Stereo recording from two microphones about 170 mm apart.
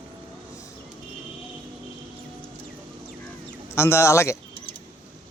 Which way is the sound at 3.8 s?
15° left (ahead or behind).